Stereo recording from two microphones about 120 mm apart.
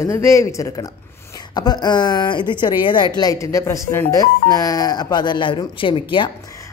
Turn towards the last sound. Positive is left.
turn(degrees=45)  # may be behind; listen again after turning